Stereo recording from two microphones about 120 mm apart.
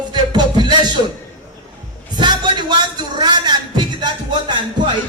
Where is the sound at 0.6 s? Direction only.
40° right (ahead or behind).